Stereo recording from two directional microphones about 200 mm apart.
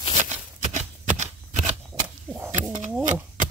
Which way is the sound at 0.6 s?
40° right (ahead or behind).